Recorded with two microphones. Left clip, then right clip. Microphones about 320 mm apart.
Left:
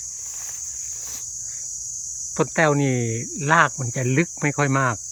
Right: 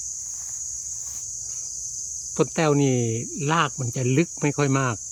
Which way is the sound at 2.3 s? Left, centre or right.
Centre.